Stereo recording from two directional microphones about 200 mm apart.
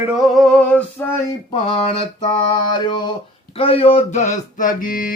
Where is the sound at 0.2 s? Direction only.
Centre (ahead or behind).